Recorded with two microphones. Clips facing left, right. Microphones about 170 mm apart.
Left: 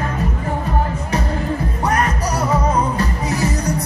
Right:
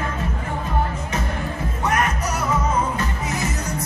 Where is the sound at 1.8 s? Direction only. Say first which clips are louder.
Left 2 dB; 35° left (ahead or behind).